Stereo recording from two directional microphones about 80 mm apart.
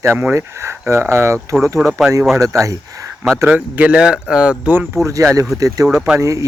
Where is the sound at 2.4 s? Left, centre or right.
Right.